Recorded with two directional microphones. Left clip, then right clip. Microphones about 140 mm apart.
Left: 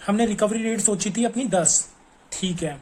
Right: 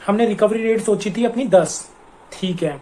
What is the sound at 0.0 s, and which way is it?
Speech, 40° left (ahead or behind).